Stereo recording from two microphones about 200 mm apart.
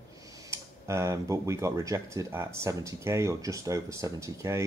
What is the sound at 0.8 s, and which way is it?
Speech, 15° right (ahead or behind).